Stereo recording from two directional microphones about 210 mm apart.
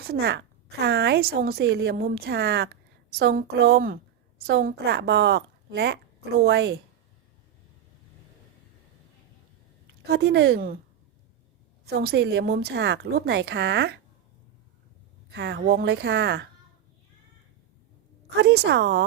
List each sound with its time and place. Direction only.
0.1 s a woman's voice: 50° right (ahead or behind)
10.1 s a woman's voice: 55° right (ahead or behind)
11.9 s a woman's voice: 50° right (ahead or behind)
15.3 s a woman's voice: 50° right (ahead or behind)
18.3 s a woman's voice: 50° right (ahead or behind)